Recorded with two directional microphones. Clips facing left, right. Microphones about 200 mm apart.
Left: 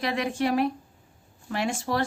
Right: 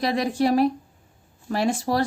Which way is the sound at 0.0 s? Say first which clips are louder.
Right 4 dB; 35° right (ahead or behind).